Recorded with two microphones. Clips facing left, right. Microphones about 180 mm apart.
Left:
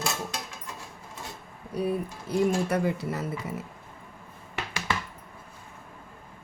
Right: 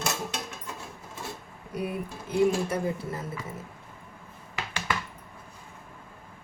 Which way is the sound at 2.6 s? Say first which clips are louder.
Left 3 dB; 70° left (ahead or behind).